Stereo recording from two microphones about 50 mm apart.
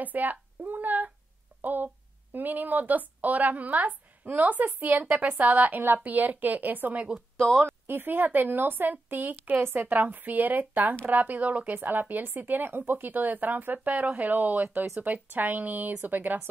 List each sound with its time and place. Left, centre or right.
0.0 s speech: right
7.3 s speech: centre
7.6 s speech: right